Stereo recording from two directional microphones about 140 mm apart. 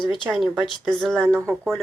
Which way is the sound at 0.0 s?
Centre (ahead or behind).